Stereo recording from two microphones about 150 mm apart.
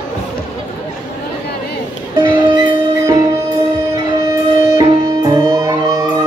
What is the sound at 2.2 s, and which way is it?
Music, 30° right (ahead or behind).